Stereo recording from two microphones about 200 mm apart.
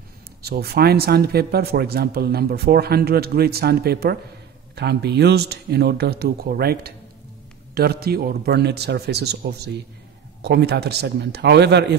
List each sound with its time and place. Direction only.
0.4 s a man's voice: 50° right (ahead or behind)